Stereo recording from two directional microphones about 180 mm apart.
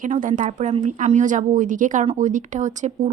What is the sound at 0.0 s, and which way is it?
A woman's voice, 45° right (ahead or behind).